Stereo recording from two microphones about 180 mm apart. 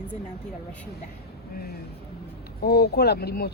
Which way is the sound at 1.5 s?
55° left (ahead or behind).